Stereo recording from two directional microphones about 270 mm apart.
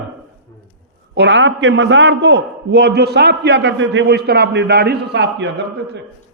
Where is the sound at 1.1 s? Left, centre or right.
Right.